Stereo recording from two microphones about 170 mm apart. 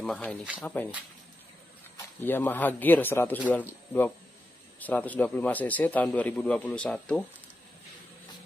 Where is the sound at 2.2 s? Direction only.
10° left (ahead or behind).